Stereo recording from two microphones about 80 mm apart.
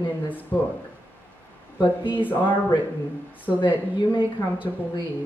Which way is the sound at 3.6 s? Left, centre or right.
Left.